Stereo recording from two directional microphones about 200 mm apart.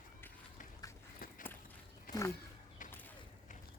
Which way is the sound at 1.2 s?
45° left (ahead or behind).